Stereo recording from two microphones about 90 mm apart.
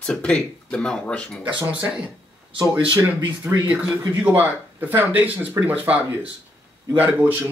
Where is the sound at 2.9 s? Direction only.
25° right (ahead or behind).